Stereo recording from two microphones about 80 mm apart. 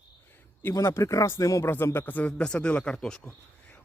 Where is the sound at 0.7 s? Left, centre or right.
Left.